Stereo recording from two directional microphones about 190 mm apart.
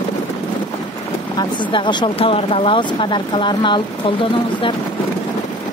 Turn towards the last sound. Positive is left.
turn(degrees=25)  # may be behind; listen again after turning